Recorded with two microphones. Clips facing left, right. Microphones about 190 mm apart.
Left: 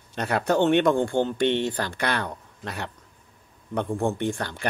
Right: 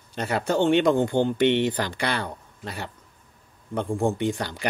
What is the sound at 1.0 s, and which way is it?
Speech, 20° right (ahead or behind).